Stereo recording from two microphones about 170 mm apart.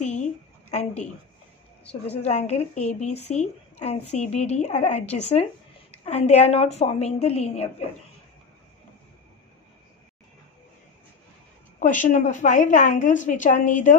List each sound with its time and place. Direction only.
0.0 s a sound: 40° left (ahead or behind)
2.2 s a woman's voice: 40° left (ahead or behind)
11.8 s a woman's voice: 50° left (ahead or behind)